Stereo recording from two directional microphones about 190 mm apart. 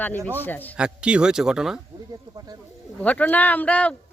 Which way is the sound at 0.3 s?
10° left (ahead or behind).